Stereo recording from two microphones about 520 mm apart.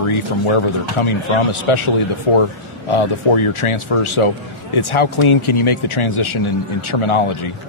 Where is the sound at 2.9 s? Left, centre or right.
Left.